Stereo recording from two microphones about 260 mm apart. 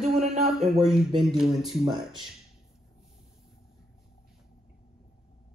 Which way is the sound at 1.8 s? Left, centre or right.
Centre.